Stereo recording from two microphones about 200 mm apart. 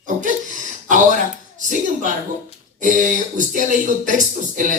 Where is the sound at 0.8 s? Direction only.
40° right (ahead or behind).